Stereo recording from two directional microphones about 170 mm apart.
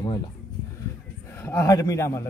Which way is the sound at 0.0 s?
25° left (ahead or behind).